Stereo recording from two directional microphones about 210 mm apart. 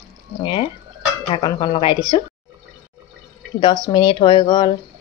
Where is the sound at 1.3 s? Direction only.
25° left (ahead or behind).